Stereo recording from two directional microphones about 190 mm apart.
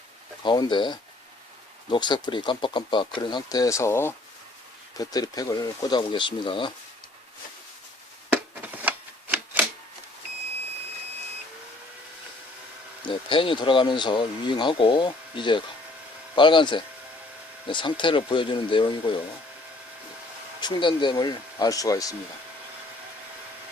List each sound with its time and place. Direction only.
0.4 s speech: 25° left (ahead or behind)
8.8 s a sound: 10° right (ahead or behind)
13.1 s speech: 25° left (ahead or behind)
20.6 s speech: 25° left (ahead or behind)